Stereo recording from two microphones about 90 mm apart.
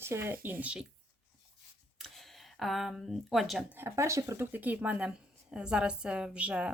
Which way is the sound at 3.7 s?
30° right (ahead or behind).